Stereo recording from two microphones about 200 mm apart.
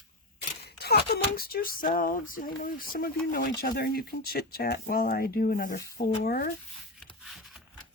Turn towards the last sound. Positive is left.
turn(degrees=0)  # may be behind; listen again after turning